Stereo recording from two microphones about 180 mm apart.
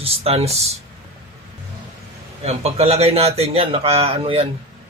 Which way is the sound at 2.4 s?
35° right (ahead or behind).